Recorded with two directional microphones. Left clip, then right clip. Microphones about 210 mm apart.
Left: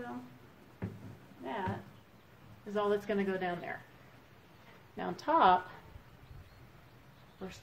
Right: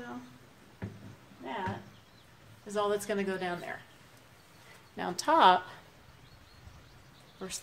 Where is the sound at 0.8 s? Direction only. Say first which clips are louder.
Even; 5° right (ahead or behind).